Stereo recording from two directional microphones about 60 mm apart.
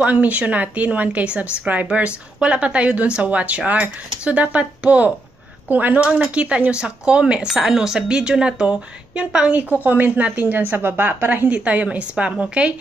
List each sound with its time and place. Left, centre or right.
0.0 s a woman's voice: right
9.6 s a woman's voice: right
11.4 s a woman's voice: right